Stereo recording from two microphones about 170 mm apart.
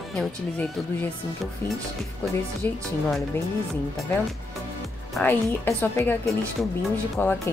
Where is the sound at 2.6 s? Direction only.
15° left (ahead or behind).